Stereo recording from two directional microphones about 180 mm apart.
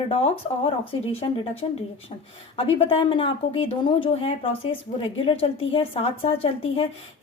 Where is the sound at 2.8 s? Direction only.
30° left (ahead or behind).